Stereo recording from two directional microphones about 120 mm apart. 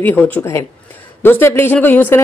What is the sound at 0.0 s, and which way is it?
Speech, 15° left (ahead or behind).